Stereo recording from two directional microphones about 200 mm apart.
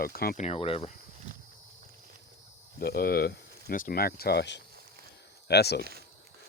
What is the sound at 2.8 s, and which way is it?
Speech, 50° left (ahead or behind).